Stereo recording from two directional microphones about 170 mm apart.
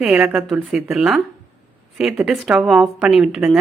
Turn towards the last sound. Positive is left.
turn(degrees=-5)  # may be behind; listen again after turning